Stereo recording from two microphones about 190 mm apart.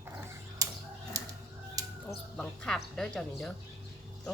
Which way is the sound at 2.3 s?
5° left (ahead or behind).